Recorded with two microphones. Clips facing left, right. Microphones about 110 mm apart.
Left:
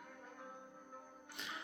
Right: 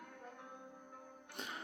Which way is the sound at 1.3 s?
40° right (ahead or behind).